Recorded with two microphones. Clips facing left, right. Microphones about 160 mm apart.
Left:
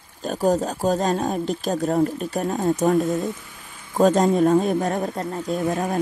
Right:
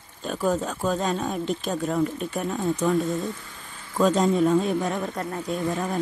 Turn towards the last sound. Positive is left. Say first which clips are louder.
# left 3 dB
turn(degrees=45)  # may be behind; listen again after turning